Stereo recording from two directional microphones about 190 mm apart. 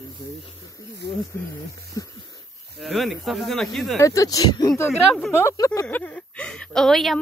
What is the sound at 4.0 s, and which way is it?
A woman's voice, 15° left (ahead or behind).